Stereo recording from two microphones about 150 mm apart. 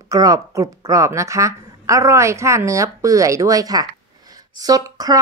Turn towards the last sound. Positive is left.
turn(degrees=-25)  # may be behind; listen again after turning